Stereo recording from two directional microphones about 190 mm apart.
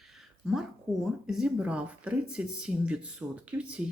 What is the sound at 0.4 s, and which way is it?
Speech, centre (ahead or behind).